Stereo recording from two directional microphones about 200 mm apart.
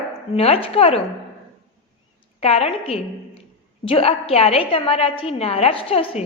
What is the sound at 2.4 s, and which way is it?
A woman's voice, 30° left (ahead or behind).